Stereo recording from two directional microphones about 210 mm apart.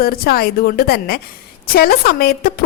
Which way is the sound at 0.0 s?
45° left (ahead or behind).